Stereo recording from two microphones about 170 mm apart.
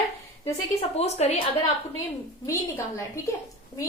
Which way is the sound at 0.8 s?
40° left (ahead or behind).